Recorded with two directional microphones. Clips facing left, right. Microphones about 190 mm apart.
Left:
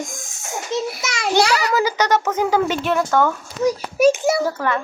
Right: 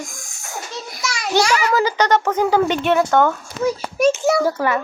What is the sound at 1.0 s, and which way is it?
Speech, 20° left (ahead or behind).